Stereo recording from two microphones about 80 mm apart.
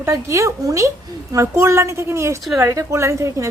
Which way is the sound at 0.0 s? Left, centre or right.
Right.